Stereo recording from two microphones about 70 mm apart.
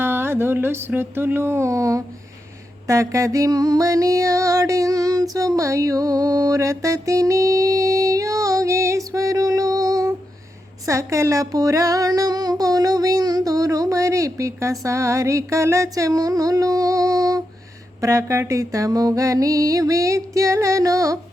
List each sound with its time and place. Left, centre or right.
0.0 s a sound: right
2.8 s music: right
10.8 s speech: right
18.0 s music: right